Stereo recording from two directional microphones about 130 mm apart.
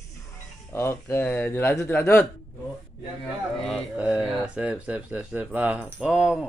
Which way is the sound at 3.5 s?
5° left (ahead or behind).